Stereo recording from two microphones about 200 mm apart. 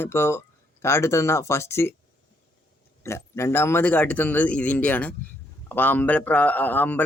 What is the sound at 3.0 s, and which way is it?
Speech, 15° left (ahead or behind).